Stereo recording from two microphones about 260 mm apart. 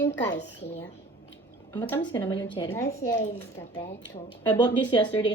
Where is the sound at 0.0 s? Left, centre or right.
Left.